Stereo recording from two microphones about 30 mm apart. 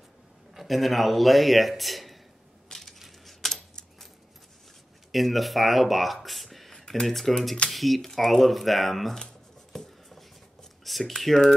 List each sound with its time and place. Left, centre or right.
0.6 s a man's voice: centre
2.7 s crushing: centre
3.4 s coin: centre
5.1 s a man's voice: centre
6.2 s a sound: centre
6.7 s computer keyboard: left
7.1 s a man's voice: centre
9.7 s writing: centre
10.8 s speech: centre